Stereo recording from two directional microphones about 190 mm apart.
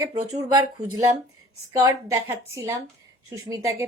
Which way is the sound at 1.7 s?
15° right (ahead or behind).